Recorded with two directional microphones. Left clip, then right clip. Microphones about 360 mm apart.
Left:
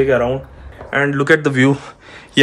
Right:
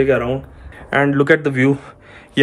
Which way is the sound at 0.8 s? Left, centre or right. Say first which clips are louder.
Right 1 dB; centre.